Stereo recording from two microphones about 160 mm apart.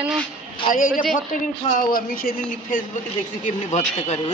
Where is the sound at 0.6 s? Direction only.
55° left (ahead or behind).